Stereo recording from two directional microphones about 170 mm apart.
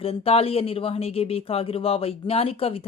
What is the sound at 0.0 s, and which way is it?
A woman's voice, 35° left (ahead or behind).